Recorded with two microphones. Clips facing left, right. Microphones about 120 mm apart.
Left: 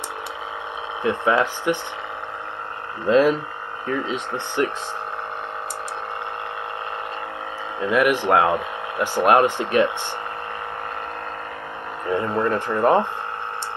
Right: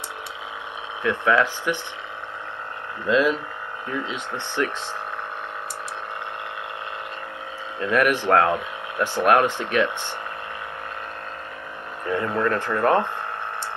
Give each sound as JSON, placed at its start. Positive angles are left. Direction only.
{"t": 1.0, "sound": "speech", "side_deg": 25}
{"t": 3.1, "sound": "speech", "side_deg": 45}
{"t": 7.8, "sound": "speech", "side_deg": 10}
{"t": 12.1, "sound": "speech", "side_deg": 20}